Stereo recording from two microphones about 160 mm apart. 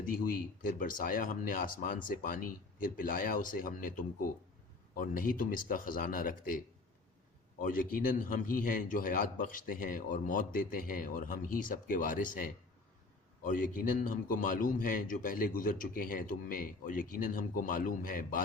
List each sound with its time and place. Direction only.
0.0 s a man's voice: 60° left (ahead or behind)
7.6 s a man's voice: 60° left (ahead or behind)